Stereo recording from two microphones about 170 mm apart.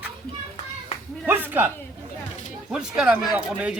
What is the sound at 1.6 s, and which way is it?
Speech, 10° right (ahead or behind).